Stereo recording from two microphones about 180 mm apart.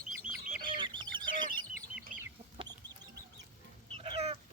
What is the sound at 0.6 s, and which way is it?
Fowl, 25° right (ahead or behind).